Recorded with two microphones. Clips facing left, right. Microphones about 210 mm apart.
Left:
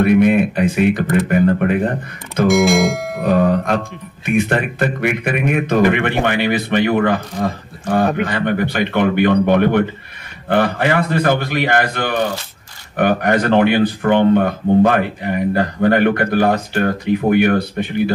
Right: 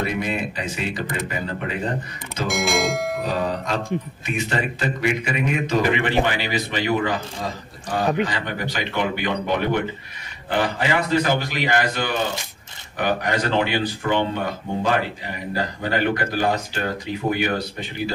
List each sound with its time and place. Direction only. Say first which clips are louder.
0.0 s speech: left 13 dB; 60° left (ahead or behind)
2.4 s music: left 9 dB; centre (ahead or behind)
3.2 s speech: left 9 dB; 55° left (ahead or behind)